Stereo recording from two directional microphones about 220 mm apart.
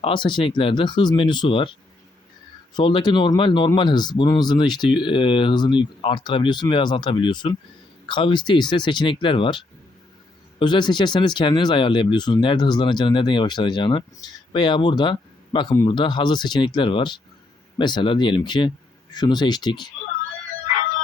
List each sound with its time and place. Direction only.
0.0 s speech: 20° left (ahead or behind)
2.7 s speech: 20° left (ahead or behind)
10.6 s speech: 20° left (ahead or behind)